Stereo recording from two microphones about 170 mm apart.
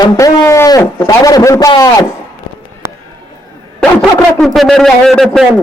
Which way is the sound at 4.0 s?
Centre (ahead or behind).